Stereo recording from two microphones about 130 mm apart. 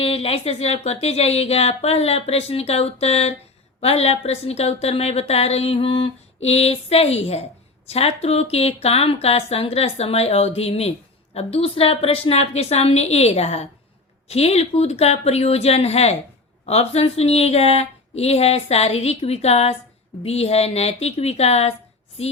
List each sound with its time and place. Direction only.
0.0 s a woman's voice: 45° left (ahead or behind)